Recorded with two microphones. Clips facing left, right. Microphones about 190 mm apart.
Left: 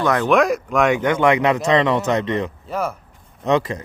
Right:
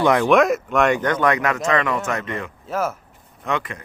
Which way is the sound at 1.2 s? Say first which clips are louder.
Left 4 dB; 25° left (ahead or behind).